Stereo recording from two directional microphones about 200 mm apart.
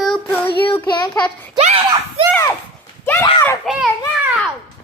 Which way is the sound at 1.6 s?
30° right (ahead or behind).